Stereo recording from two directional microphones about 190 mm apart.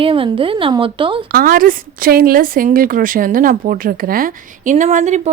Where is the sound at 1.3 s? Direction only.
50° right (ahead or behind).